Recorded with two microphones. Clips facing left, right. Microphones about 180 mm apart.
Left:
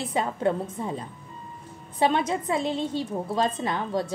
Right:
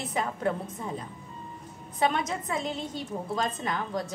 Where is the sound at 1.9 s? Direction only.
30° left (ahead or behind).